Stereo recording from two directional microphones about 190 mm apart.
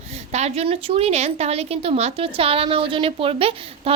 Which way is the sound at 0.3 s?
35° right (ahead or behind).